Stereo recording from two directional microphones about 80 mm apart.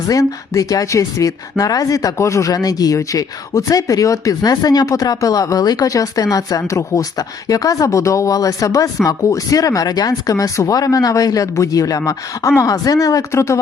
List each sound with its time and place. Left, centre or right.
0.1 s speech: left
2.5 s speech: left
4.4 s speech: left